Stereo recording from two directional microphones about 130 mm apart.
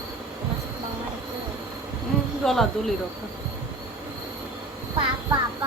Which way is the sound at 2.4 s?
Centre (ahead or behind).